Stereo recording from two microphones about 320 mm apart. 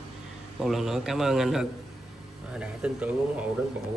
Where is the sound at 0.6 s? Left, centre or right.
Centre.